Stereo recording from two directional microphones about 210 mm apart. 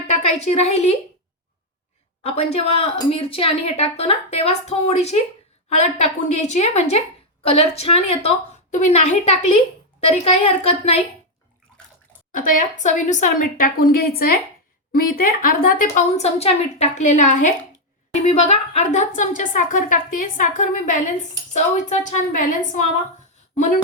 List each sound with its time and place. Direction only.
0.3 s speech: 30° left (ahead or behind)
2.2 s a woman's voice: 30° left (ahead or behind)
12.4 s a woman's voice: 35° left (ahead or behind)